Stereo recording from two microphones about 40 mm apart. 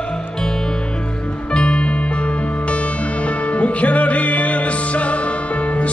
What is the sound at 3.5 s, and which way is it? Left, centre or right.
Music, left.